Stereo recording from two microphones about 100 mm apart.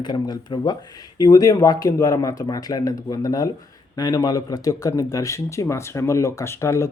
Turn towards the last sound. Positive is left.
turn(degrees=30)  # may be behind; listen again after turning